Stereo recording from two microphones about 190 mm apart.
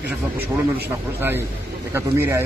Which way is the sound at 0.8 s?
10° right (ahead or behind).